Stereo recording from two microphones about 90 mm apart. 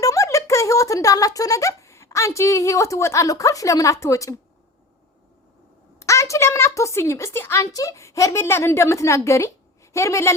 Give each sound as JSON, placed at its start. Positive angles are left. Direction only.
{"t": 0.0, "sound": "speech", "side_deg": 35}
{"t": 6.0, "sound": "a woman's voice", "side_deg": 35}